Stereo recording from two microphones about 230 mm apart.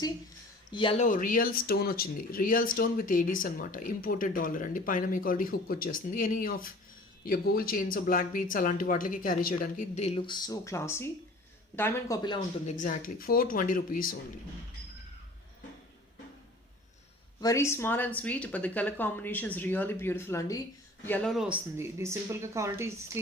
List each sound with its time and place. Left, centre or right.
0.7 s speech: left
1.0 s speech: left; by 12.4 s centre
12.6 s speech: left
17.4 s speech: centre
21.1 s speech: centre